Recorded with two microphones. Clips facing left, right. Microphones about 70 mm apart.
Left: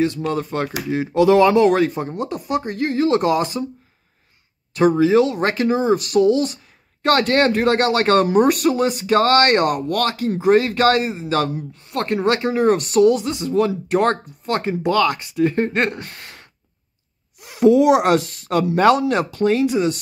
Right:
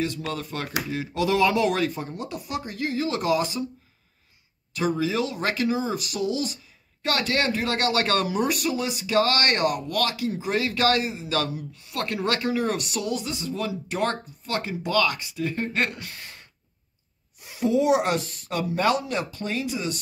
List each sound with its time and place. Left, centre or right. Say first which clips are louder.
0.0 s speech: left 8 dB; left
4.7 s speech: left 11 dB; left
17.4 s speech: left 9 dB; left